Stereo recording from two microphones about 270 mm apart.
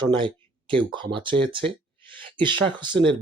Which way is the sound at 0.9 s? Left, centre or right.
Centre.